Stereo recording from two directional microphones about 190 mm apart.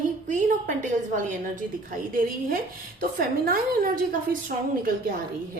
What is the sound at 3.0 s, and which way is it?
Speech, 50° right (ahead or behind).